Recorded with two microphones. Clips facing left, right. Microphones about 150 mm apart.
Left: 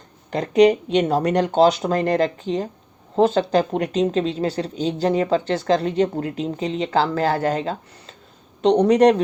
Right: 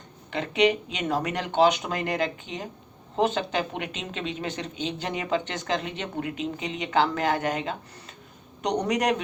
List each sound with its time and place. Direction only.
0.3 s a woman's voice: 40° left (ahead or behind)